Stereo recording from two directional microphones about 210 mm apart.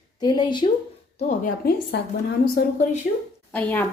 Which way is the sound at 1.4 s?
45° left (ahead or behind).